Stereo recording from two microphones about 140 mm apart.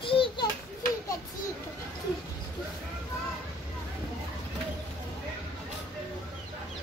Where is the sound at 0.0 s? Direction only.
40° left (ahead or behind).